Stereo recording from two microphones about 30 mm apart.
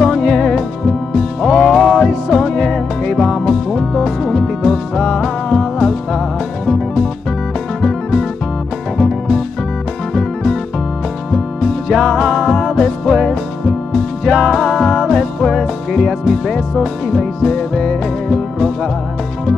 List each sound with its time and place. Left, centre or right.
0.4 s music: centre